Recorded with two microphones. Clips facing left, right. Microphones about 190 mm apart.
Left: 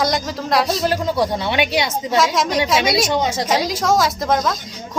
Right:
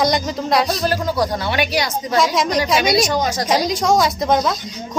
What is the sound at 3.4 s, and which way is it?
A woman's voice, centre (ahead or behind).